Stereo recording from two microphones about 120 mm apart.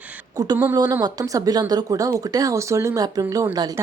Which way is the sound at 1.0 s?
35° right (ahead or behind).